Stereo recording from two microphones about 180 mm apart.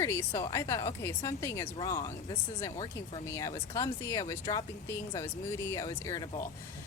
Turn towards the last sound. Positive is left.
turn(degrees=15)  # may be behind; listen again after turning